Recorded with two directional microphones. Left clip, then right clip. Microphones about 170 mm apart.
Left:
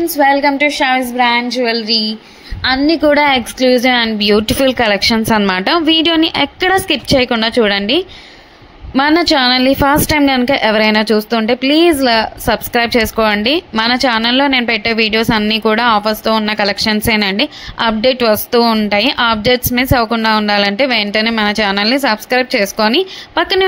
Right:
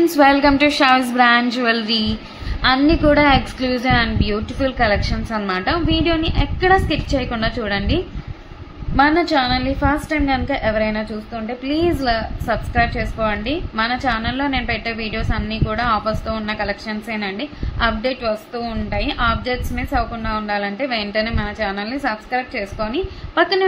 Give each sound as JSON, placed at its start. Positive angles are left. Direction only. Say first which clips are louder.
{"t": 0.1, "sound": "a woman's voice", "louder": "left 2 dB", "side_deg": 0}
{"t": 3.1, "sound": "a woman's voice", "louder": "left 3 dB", "side_deg": 35}
{"t": 11.6, "sound": "a woman's voice", "louder": "left 6 dB", "side_deg": 35}
{"t": 18.2, "sound": "a woman's voice", "louder": "left 12 dB", "side_deg": 55}